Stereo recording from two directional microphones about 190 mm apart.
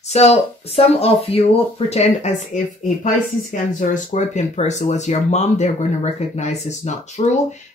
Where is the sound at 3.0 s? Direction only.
45° left (ahead or behind).